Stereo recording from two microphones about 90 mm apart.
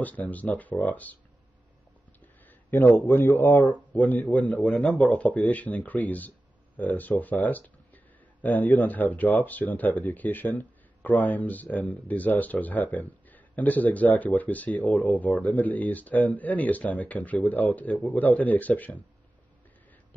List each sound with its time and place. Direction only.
0.0 s speech: 15° left (ahead or behind)
2.7 s speech: 25° left (ahead or behind)